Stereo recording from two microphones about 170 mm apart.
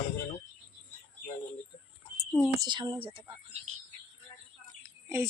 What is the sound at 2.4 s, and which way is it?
Speech, 25° right (ahead or behind).